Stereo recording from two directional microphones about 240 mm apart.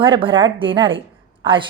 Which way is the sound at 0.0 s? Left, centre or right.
Right.